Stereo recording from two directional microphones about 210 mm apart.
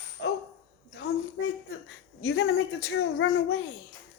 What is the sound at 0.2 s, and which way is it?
Dog, 65° left (ahead or behind).